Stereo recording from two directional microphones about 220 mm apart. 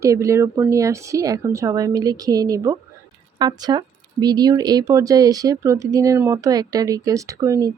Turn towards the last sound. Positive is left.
turn(degrees=-15)  # may be behind; listen again after turning